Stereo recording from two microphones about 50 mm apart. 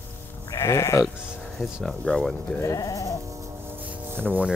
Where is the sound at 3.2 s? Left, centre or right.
Right.